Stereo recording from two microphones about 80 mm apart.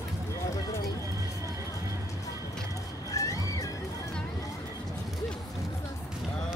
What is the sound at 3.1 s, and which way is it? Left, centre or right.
Music, left.